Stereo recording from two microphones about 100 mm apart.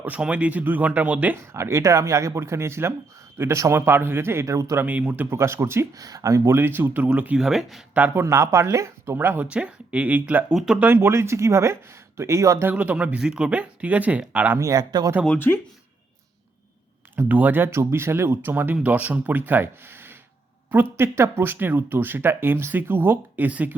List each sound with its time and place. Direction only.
0.0 s speech: 15° right (ahead or behind); by 4.9 s 30° right (ahead or behind)
4.9 s speech: 15° right (ahead or behind)
7.9 s speech: 20° right (ahead or behind)
12.6 s speech: 15° right (ahead or behind)
14.6 s speech: 40° right (ahead or behind)
17.2 s speech: 20° right (ahead or behind)